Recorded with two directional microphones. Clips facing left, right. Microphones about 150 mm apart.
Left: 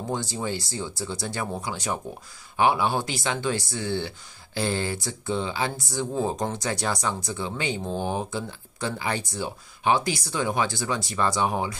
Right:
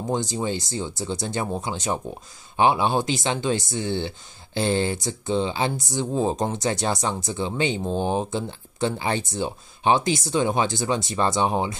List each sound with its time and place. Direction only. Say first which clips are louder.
0.0 s speech: right 4 dB; 20° right (ahead or behind)